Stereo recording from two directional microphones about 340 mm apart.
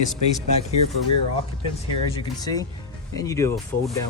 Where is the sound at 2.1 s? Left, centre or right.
Centre.